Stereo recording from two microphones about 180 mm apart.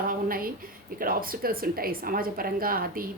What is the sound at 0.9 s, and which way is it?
A woman's voice, 55° right (ahead or behind).